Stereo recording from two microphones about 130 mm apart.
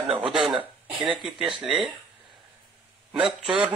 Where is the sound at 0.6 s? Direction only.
10° right (ahead or behind).